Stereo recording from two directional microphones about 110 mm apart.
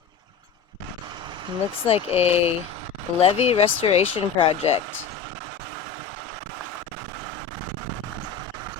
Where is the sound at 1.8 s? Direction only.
65° left (ahead or behind).